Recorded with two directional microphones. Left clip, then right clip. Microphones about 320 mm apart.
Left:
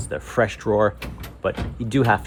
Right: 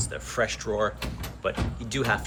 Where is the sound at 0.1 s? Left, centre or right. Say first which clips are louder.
Left 7 dB; centre.